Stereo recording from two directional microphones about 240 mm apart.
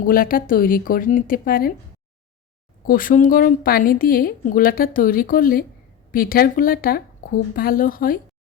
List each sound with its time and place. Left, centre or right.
0.0 s a woman's voice: left
2.8 s a woman's voice: left